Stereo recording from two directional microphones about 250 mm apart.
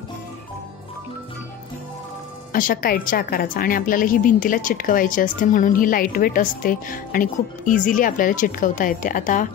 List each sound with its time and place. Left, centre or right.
2.5 s a woman's voice: left